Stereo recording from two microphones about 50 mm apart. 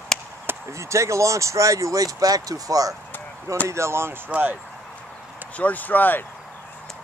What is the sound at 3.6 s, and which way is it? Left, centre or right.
Speech, right.